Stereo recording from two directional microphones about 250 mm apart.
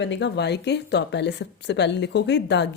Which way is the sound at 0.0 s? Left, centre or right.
Left.